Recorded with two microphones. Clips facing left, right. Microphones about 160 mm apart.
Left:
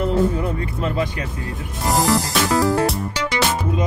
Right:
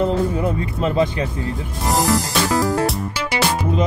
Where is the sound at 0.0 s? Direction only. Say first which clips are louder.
Right 1 dB; 20° right (ahead or behind).